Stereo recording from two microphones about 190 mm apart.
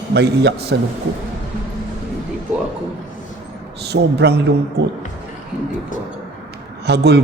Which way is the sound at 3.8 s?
60° right (ahead or behind).